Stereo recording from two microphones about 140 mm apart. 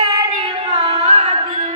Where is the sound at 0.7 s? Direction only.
45° right (ahead or behind).